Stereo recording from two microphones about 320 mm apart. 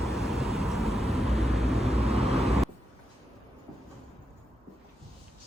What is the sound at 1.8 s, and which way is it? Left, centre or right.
Vehicle, centre.